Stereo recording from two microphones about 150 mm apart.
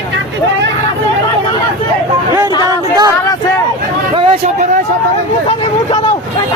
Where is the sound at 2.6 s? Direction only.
25° right (ahead or behind).